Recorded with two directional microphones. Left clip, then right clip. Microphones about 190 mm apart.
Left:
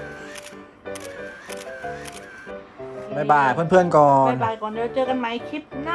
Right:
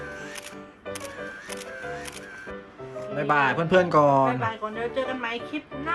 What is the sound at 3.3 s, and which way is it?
Speech, 10° left (ahead or behind).